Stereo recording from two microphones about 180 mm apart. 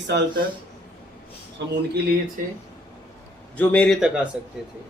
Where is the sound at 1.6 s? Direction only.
75° right (ahead or behind).